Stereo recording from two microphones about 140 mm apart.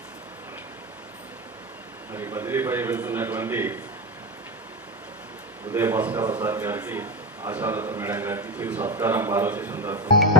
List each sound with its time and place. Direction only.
2.1 s a man's voice: 20° right (ahead or behind)
5.7 s a man's voice: 15° right (ahead or behind)